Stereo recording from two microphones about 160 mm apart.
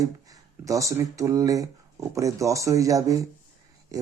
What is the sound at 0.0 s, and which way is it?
Speech, 20° right (ahead or behind).